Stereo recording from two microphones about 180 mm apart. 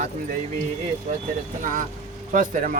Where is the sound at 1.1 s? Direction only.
40° right (ahead or behind).